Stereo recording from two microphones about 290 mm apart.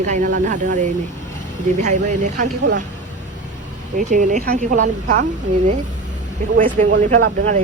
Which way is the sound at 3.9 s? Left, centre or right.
Right.